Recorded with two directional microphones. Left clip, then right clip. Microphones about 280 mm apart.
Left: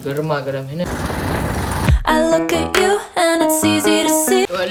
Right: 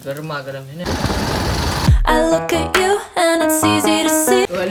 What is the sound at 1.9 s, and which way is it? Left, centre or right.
Music, centre.